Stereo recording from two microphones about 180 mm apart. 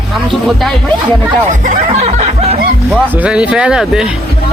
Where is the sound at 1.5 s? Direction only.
40° right (ahead or behind).